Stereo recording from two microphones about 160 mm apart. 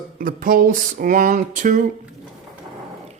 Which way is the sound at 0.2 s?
60° right (ahead or behind).